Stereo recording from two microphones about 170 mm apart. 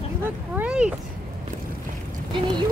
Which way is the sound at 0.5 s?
5° right (ahead or behind).